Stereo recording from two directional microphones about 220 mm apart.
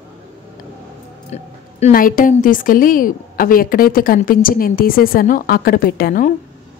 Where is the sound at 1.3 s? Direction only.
30° left (ahead or behind).